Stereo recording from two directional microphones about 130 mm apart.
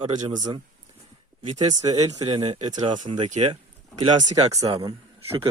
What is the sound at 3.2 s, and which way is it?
Speech, 60° right (ahead or behind).